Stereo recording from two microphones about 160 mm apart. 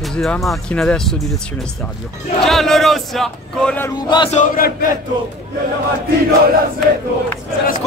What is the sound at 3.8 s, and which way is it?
Chant, 25° left (ahead or behind).